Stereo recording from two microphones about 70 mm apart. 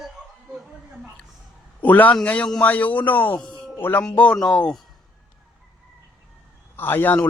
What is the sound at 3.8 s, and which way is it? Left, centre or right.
Speech, left.